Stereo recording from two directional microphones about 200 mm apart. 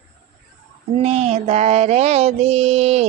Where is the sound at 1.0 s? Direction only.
30° right (ahead or behind).